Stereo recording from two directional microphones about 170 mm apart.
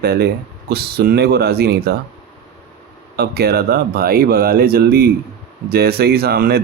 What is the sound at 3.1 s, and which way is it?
Speech, 65° right (ahead or behind).